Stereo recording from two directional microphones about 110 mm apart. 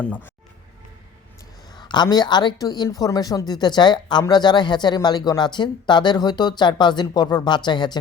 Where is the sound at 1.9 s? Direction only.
40° left (ahead or behind).